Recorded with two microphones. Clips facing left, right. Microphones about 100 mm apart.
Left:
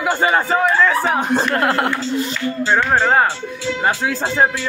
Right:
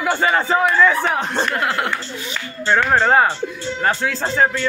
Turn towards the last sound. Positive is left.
turn(degrees=0)  # may be behind; listen again after turning